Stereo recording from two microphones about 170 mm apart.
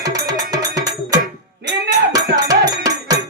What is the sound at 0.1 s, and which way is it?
Music, 20° right (ahead or behind).